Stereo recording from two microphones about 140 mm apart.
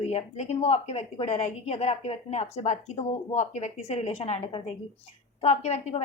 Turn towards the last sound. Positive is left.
turn(degrees=50)  # may be behind; listen again after turning